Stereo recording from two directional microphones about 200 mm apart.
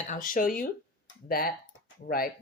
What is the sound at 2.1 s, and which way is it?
Speech, 45° left (ahead or behind).